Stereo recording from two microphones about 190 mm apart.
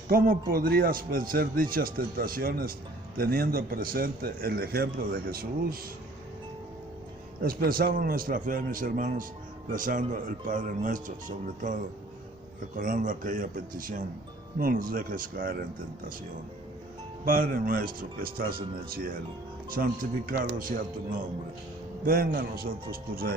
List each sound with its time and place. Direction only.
0.1 s a man's voice: 50° right (ahead or behind)
7.4 s a man's voice: 50° right (ahead or behind)
17.2 s a man's voice: 45° right (ahead or behind)